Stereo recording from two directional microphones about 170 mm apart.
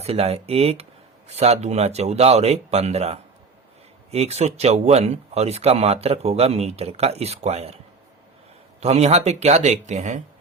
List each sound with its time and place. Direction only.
0.0 s speech: 35° right (ahead or behind)
8.8 s speech: 40° right (ahead or behind)